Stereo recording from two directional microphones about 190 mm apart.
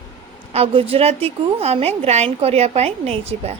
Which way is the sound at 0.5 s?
30° right (ahead or behind).